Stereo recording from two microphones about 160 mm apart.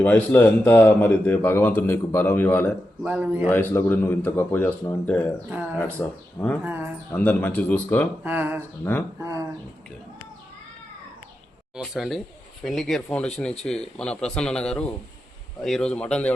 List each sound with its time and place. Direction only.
0.0 s speech: 10° left (ahead or behind)
3.1 s a man's voice: 10° right (ahead or behind)
3.5 s speech: 10° left (ahead or behind)
5.5 s a man's voice: 10° right (ahead or behind)
5.7 s speech: 10° left (ahead or behind)
6.6 s a man's voice: 10° right (ahead or behind)
7.1 s speech: 10° left (ahead or behind)
8.2 s a man's voice: 10° right (ahead or behind)
8.8 s speech: 10° left (ahead or behind)
9.2 s speech: 20° right (ahead or behind)
11.8 s speech: centre (ahead or behind)